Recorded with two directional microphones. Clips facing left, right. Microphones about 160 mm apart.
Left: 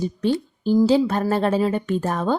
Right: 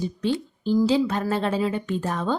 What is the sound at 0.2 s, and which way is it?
Speech, 45° left (ahead or behind).